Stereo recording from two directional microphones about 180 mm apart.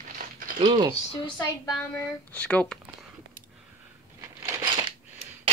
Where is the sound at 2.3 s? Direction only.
5° left (ahead or behind).